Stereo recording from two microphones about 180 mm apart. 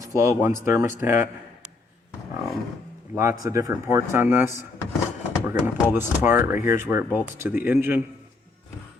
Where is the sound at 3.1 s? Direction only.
15° right (ahead or behind).